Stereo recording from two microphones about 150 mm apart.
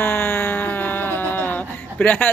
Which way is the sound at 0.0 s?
15° left (ahead or behind).